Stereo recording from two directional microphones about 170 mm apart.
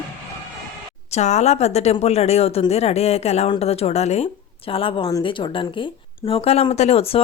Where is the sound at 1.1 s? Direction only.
40° left (ahead or behind).